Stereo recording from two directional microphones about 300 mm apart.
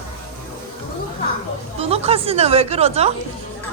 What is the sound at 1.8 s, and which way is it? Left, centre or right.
A woman's voice, centre.